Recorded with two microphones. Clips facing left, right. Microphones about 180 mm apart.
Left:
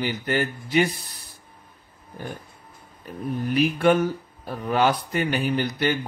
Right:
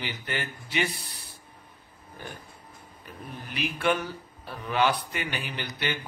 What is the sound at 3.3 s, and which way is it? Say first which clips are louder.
Speech: left 12 dB; 45° left (ahead or behind).